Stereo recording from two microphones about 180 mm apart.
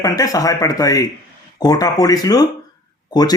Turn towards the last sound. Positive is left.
turn(degrees=20)  # may be behind; listen again after turning